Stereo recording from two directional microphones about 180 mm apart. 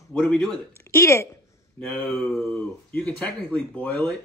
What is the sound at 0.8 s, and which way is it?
Speech, 15° left (ahead or behind).